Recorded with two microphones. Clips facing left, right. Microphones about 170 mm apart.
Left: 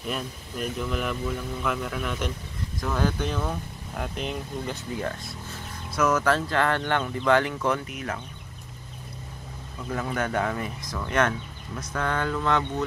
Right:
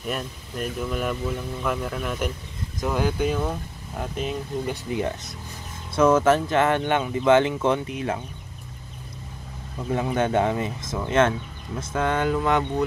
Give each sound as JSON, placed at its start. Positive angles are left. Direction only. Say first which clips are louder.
{"t": 0.0, "sound": "speech", "louder": "right 2 dB", "side_deg": -5}
{"t": 4.9, "sound": "speech", "louder": "right 4 dB", "side_deg": -20}
{"t": 10.1, "sound": "speech", "louder": "right 5 dB", "side_deg": -25}